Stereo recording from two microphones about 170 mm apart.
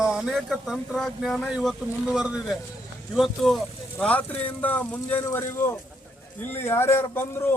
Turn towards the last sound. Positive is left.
turn(degrees=15)  # may be behind; listen again after turning